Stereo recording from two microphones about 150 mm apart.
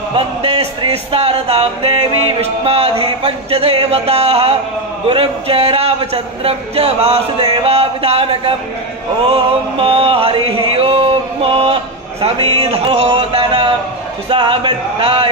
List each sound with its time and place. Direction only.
0.1 s music: 40° right (ahead or behind)